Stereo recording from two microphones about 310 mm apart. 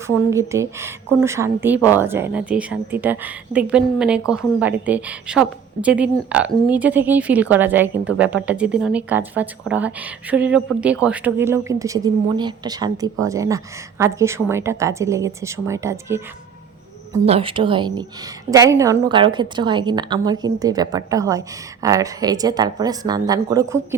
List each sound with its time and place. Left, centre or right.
0.3 s a woman's voice: centre